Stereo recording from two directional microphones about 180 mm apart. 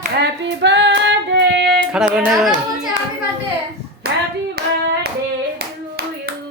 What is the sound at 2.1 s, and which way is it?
Speech, centre (ahead or behind).